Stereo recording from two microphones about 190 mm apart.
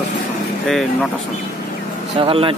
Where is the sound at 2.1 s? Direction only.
30° right (ahead or behind).